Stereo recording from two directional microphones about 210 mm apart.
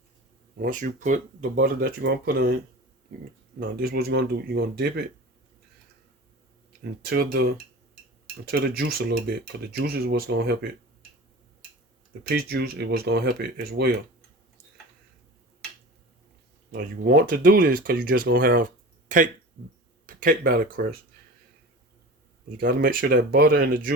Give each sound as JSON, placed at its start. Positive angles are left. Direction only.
{"t": 0.6, "sound": "speech", "side_deg": -40}
{"t": 1.5, "sound": "speech", "side_deg": -50}
{"t": 3.6, "sound": "speech", "side_deg": -45}
{"t": 7.0, "sound": "speech", "side_deg": -45}
{"t": 8.4, "sound": "speech", "side_deg": -50}
{"t": 12.3, "sound": "speech", "side_deg": -50}
{"t": 16.7, "sound": "speech", "side_deg": -45}
{"t": 22.5, "sound": "speech", "side_deg": -45}